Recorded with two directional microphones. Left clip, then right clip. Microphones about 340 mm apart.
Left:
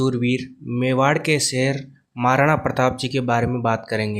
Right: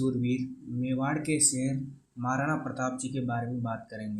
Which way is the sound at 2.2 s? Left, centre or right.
Left.